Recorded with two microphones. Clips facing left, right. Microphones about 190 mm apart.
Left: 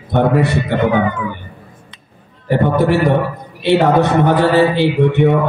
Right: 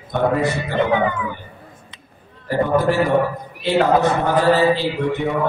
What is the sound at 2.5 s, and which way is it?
A man's voice, 70° left (ahead or behind).